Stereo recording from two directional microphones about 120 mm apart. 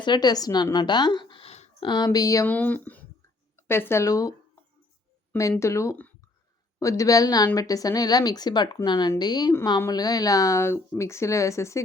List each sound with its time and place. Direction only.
0.0 s speech: 35° left (ahead or behind); by 1.9 s 55° left (ahead or behind)
1.9 s speech: 35° left (ahead or behind)
2.5 s speech: 15° left (ahead or behind)
5.4 s a woman's voice: 25° left (ahead or behind)